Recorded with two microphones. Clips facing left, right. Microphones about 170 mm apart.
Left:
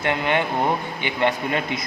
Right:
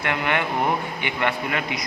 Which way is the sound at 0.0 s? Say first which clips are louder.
Left 2 dB; 25° left (ahead or behind).